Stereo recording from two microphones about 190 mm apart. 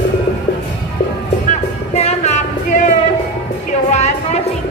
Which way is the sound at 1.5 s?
35° left (ahead or behind).